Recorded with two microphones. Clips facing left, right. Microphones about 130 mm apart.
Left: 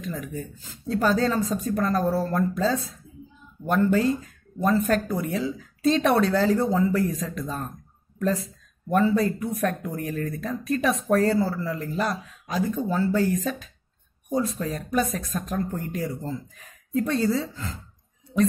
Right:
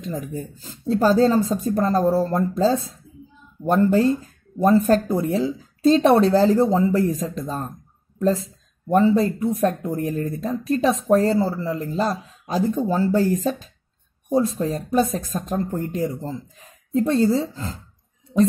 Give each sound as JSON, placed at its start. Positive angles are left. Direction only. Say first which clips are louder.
{"t": 0.0, "sound": "speech", "louder": "right 3 dB", "side_deg": -30}